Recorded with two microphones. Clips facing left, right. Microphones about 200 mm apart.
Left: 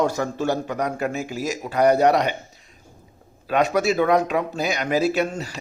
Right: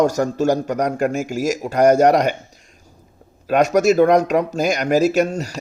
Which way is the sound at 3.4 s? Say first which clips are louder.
Right 5 dB; 45° right (ahead or behind).